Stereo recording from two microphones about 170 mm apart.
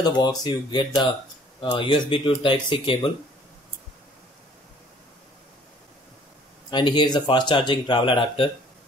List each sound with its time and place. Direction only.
0.0 s speech: 25° left (ahead or behind)
6.7 s speech: 25° left (ahead or behind)